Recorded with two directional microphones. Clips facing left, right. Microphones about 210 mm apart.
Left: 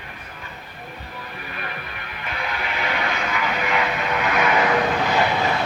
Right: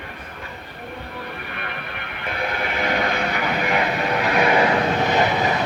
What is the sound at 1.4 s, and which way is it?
Music, 60° right (ahead or behind).